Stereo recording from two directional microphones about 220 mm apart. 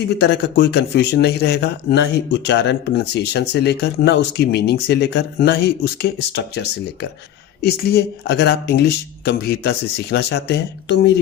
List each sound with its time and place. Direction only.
0.2 s speech: 50° left (ahead or behind)